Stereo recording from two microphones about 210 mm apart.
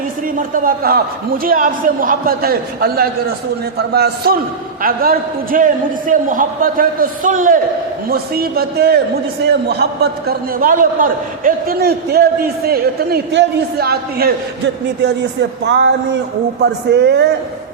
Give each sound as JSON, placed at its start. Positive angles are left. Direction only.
{"t": 0.3, "sound": "a man's voice", "side_deg": -40}